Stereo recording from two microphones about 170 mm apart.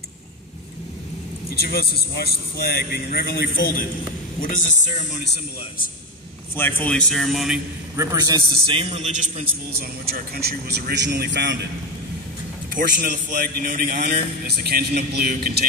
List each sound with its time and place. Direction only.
1.5 s a man's voice: 70° left (ahead or behind)
4.4 s speech: 50° left (ahead or behind)
6.5 s a man's voice: 10° left (ahead or behind)
7.9 s a man's voice: 15° right (ahead or behind)
8.6 s a man's voice: 35° right (ahead or behind)
9.7 s speech: 65° right (ahead or behind); by 11.5 s 90° right
12.7 s a man's voice: 55° right (ahead or behind)